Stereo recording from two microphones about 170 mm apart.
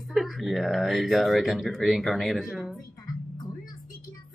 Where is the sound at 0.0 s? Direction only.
Centre (ahead or behind).